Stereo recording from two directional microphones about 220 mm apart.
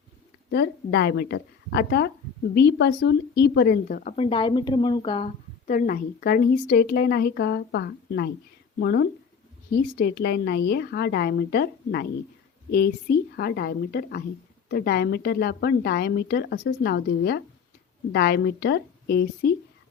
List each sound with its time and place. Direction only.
0.5 s a woman's voice: 45° left (ahead or behind); by 5.3 s 25° left (ahead or behind)
5.6 s speech: 40° left (ahead or behind)